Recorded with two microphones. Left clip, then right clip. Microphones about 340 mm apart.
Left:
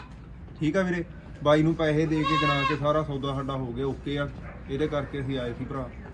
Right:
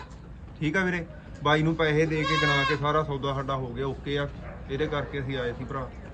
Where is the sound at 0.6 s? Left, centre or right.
Centre.